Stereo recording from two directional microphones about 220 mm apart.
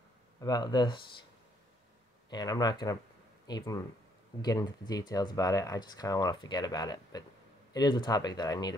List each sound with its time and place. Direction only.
0.4 s speech: 20° left (ahead or behind)
2.2 s speech: 20° left (ahead or behind)